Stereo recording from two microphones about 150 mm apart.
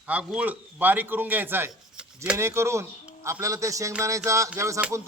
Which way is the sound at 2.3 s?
20° right (ahead or behind).